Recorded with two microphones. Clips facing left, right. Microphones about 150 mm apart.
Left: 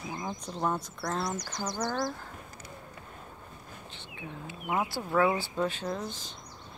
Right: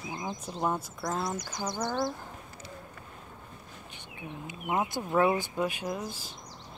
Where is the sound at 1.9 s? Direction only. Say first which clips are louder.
Right 2 dB; 20° right (ahead or behind).